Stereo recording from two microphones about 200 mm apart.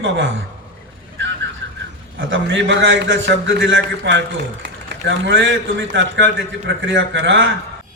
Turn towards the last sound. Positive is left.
turn(degrees=-65)  # may be behind; listen again after turning